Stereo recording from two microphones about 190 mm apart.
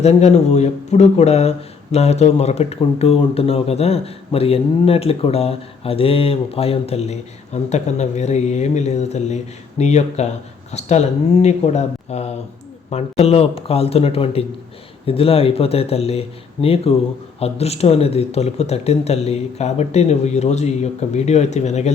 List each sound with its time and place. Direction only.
0.0 s speech: 35° left (ahead or behind)